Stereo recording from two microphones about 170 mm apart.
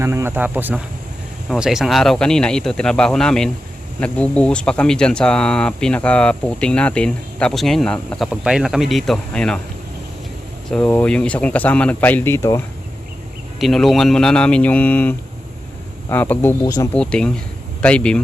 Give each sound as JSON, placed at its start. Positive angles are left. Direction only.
{"t": 0.0, "sound": "speech", "side_deg": -15}
{"t": 10.7, "sound": "speech", "side_deg": 5}
{"t": 13.6, "sound": "speech", "side_deg": 0}
{"t": 16.9, "sound": "speech", "side_deg": 5}